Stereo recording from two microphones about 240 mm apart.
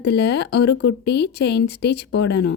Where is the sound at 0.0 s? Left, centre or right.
Left.